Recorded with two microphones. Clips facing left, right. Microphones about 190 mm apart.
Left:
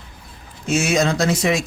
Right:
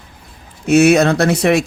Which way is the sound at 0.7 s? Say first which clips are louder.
Right 8 dB; 60° right (ahead or behind).